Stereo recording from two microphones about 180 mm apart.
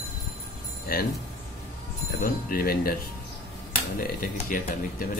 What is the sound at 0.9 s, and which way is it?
Speech, 55° left (ahead or behind).